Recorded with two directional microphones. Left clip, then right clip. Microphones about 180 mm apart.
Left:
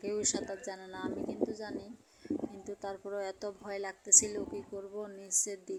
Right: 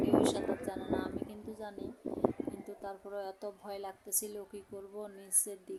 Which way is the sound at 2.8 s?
10° left (ahead or behind).